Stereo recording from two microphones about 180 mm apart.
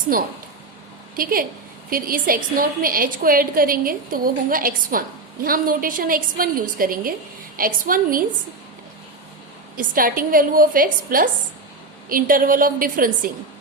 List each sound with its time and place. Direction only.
1.1 s a woman's voice: 55° right (ahead or behind)
9.7 s a woman's voice: 50° right (ahead or behind)